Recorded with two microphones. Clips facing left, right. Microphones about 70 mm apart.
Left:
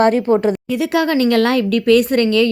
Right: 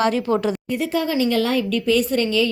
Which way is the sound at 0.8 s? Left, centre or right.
Left.